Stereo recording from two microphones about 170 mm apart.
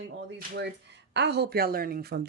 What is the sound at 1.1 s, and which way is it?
Speech, 85° right.